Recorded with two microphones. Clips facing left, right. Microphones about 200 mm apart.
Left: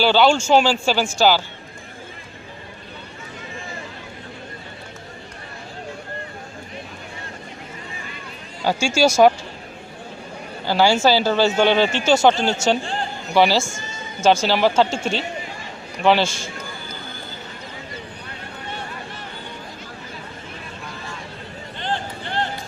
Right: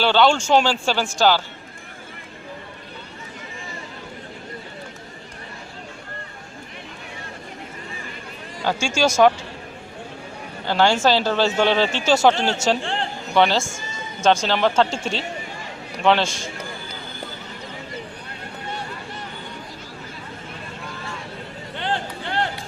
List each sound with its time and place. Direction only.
0.0 s speech: 5° left (ahead or behind)
8.6 s speech: 10° left (ahead or behind)
10.7 s speech: 5° left (ahead or behind)
12.8 s speech: 70° right (ahead or behind)
13.3 s speech: 5° left (ahead or behind)
21.8 s a sound: 65° right (ahead or behind)